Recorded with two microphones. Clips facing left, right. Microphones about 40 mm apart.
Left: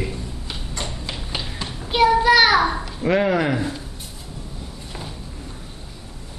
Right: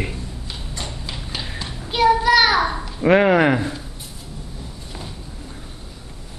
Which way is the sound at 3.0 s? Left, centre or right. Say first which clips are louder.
Right 5 dB; right.